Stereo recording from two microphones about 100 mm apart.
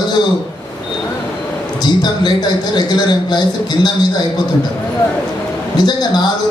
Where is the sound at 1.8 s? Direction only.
45° left (ahead or behind).